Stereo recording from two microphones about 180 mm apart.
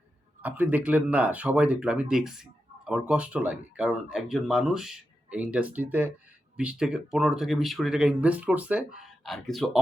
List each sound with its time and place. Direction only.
0.4 s speech: 10° right (ahead or behind)